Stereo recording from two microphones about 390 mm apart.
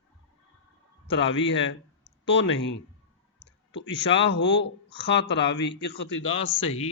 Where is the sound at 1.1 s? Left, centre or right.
Left.